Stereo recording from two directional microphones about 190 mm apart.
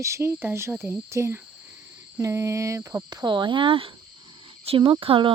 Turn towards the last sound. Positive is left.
turn(degrees=-30)  # may be behind; listen again after turning